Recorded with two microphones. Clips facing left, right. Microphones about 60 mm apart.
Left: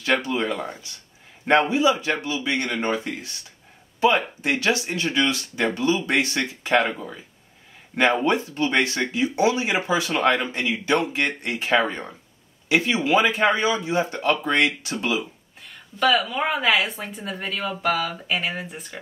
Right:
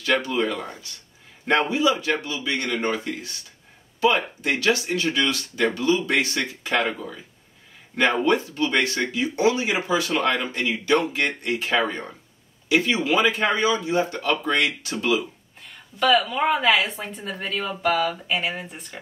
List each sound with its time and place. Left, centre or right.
0.0 s speech: left
7.9 s speech: left
11.8 s speech: centre
15.6 s speech: centre